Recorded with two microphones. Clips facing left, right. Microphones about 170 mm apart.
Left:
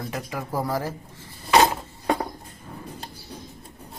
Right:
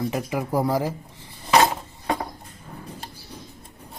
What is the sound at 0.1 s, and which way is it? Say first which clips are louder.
Speech: right 5 dB; 20° right (ahead or behind).